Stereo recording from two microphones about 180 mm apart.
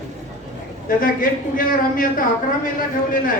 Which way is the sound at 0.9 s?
50° left (ahead or behind).